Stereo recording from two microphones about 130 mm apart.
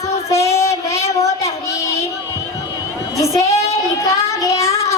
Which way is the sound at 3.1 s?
25° left (ahead or behind).